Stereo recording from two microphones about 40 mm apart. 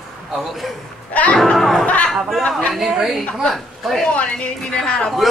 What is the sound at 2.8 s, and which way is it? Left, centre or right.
A woman's voice, centre.